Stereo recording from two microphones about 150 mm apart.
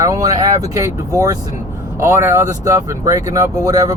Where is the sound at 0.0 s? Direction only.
25° right (ahead or behind).